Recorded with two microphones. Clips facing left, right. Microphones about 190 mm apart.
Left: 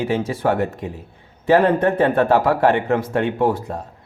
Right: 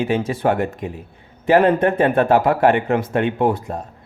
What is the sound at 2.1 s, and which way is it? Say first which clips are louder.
Speech: right 1 dB; 20° right (ahead or behind).